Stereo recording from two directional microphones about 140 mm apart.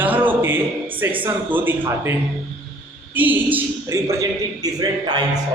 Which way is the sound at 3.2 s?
10° right (ahead or behind).